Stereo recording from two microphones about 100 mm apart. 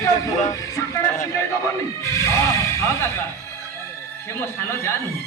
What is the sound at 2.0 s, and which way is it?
Speech, 30° left (ahead or behind).